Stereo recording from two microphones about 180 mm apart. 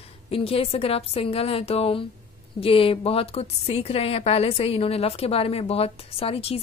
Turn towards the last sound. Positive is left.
turn(degrees=35)  # may be behind; listen again after turning